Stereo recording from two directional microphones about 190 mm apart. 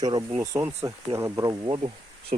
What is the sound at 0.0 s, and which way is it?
Speech, 20° right (ahead or behind).